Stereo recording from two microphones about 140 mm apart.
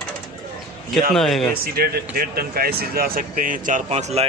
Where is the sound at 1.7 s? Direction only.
90° right; by 3.8 s 70° right (ahead or behind).